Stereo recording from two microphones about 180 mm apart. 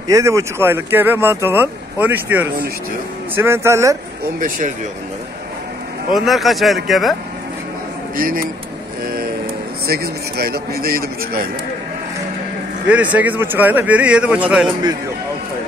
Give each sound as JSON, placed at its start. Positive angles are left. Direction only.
{"t": 0.1, "sound": "speech", "side_deg": -15}
{"t": 4.4, "sound": "speech", "side_deg": -45}
{"t": 6.1, "sound": "speech", "side_deg": 0}
{"t": 8.2, "sound": "speech", "side_deg": -50}
{"t": 9.0, "sound": "vehicle", "side_deg": -55}
{"t": 9.8, "sound": "a man's voice", "side_deg": -60}
{"t": 12.8, "sound": "speech", "side_deg": -10}